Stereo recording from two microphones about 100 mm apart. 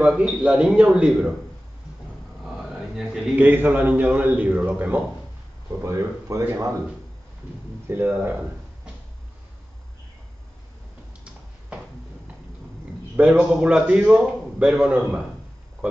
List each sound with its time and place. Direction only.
0.0 s a man's voice: 15° right (ahead or behind)
2.4 s a sound: 5° right (ahead or behind)
3.3 s a man's voice: 20° right (ahead or behind)
5.8 s speech: 30° right (ahead or behind)
7.9 s speech: 20° right (ahead or behind)
13.1 s a man's voice: 15° right (ahead or behind)